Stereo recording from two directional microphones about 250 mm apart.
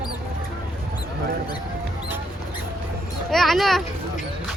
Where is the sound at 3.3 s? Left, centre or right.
Centre.